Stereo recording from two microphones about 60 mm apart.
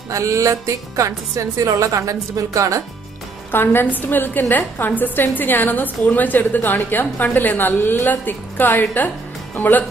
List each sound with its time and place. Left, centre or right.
0.1 s speech: right
3.5 s a woman's voice: left